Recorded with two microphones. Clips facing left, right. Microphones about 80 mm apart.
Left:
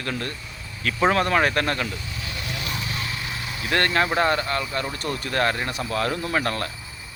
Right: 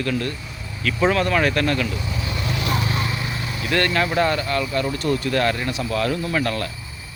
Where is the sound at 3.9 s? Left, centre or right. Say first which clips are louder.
Even; left.